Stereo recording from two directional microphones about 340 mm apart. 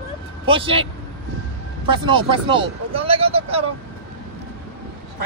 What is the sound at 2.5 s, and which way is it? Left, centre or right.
Speech, centre.